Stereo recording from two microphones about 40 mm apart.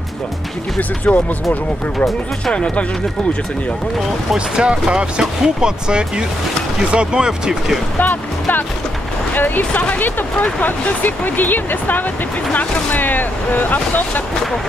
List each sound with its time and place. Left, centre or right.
0.7 s speech: left
2.5 s speech: left
4.6 s speech: right
8.0 s speech: left